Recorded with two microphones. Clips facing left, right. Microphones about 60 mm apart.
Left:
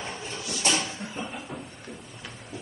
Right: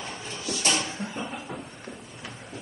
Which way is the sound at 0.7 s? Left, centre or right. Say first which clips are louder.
Left 1 dB; centre.